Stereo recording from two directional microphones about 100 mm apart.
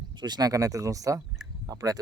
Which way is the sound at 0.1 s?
45° right (ahead or behind).